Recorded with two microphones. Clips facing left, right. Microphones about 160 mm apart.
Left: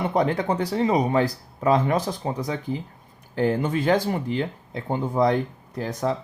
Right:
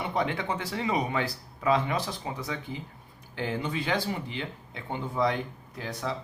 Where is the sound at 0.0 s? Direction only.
40° left (ahead or behind).